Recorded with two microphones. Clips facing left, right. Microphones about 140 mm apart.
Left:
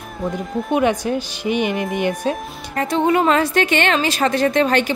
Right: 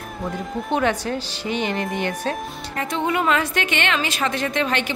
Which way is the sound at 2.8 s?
35° left (ahead or behind).